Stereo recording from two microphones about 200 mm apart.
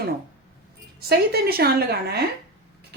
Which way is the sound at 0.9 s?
50° right (ahead or behind).